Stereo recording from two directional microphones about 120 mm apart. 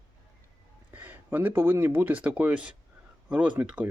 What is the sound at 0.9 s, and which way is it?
Speech, 15° right (ahead or behind).